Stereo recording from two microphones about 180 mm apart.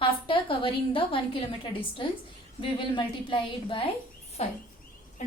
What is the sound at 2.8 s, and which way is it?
A woman's voice, 25° left (ahead or behind).